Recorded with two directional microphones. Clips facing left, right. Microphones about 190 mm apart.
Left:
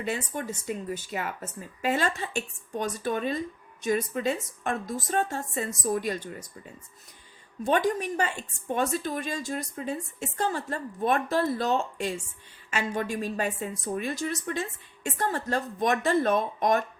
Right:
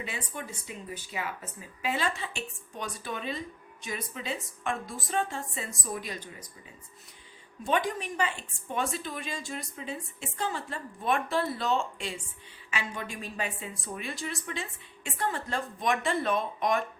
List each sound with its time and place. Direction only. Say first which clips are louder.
0.0 s a woman's voice: left 7 dB; 45° left (ahead or behind)
7.6 s a woman's voice: left 4 dB; 45° left (ahead or behind)